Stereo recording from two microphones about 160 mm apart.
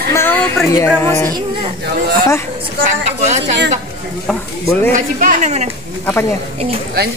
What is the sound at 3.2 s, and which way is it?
Speech, 45° right (ahead or behind).